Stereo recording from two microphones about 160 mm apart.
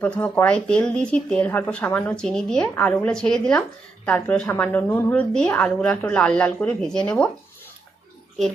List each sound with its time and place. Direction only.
0.0 s speech: 10° left (ahead or behind)